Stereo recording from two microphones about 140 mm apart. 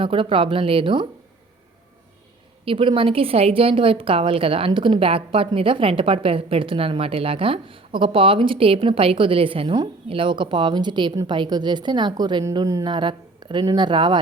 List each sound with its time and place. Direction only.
0.0 s a woman's voice: 40° right (ahead or behind)
2.6 s a woman's voice: 40° right (ahead or behind); by 12.8 s 20° right (ahead or behind)
12.8 s a woman's voice: 35° right (ahead or behind)